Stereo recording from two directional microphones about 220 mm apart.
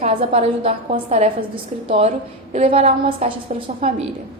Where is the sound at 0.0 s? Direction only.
25° right (ahead or behind).